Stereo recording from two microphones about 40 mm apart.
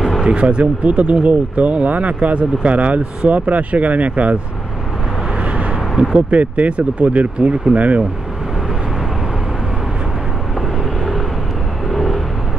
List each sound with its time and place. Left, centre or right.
0.3 s speech: right
6.1 s speech: right
11.9 s vehicle: centre